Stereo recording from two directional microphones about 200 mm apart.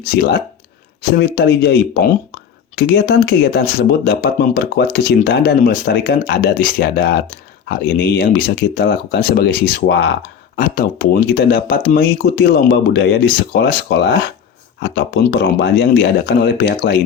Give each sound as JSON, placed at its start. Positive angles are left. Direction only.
{"t": 1.1, "sound": "speech", "side_deg": 55}
{"t": 10.6, "sound": "speech", "side_deg": 50}